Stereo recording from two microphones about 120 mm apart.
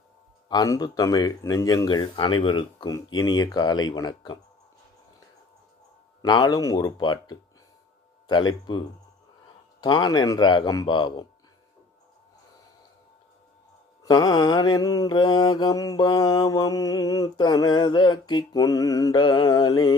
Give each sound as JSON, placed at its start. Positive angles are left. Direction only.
{"t": 0.4, "sound": "mantra", "side_deg": 30}
{"t": 6.2, "sound": "mantra", "side_deg": 35}
{"t": 9.8, "sound": "mantra", "side_deg": 40}
{"t": 14.0, "sound": "mantra", "side_deg": 30}